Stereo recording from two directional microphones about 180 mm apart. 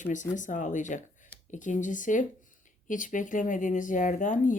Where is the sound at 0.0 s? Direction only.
45° left (ahead or behind).